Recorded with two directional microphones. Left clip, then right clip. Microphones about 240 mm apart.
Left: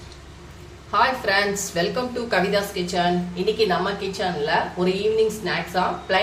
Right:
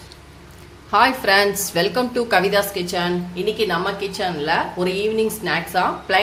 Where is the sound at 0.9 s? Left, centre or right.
Right.